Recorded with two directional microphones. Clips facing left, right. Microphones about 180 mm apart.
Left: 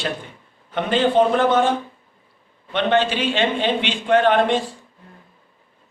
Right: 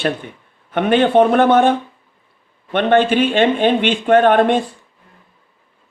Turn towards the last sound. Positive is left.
turn(degrees=-55)  # may be behind; listen again after turning